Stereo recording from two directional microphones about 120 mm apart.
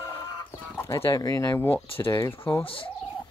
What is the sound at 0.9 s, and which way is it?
Speech, 30° left (ahead or behind).